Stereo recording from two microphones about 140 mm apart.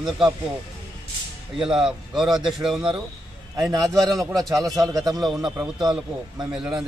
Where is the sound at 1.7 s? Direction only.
5° right (ahead or behind).